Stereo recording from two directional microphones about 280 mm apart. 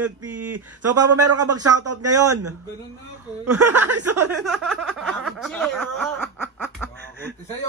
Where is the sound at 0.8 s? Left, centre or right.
Right.